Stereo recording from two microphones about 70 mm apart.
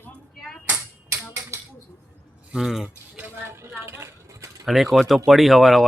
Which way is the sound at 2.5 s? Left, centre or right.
Centre.